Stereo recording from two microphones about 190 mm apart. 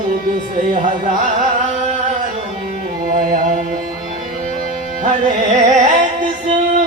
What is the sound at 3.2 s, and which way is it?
Music, 45° right (ahead or behind).